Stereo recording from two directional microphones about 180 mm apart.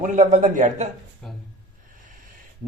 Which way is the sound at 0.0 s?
40° right (ahead or behind).